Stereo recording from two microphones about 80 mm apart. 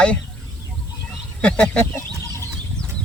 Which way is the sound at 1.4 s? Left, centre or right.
Centre.